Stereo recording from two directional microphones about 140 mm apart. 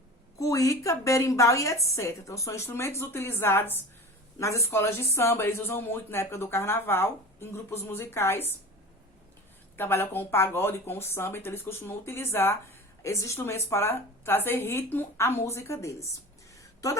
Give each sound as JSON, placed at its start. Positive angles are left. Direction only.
{"t": 0.3, "sound": "a woman's voice", "side_deg": 25}
{"t": 9.7, "sound": "speech", "side_deg": 15}
{"t": 16.6, "sound": "a sound", "side_deg": 25}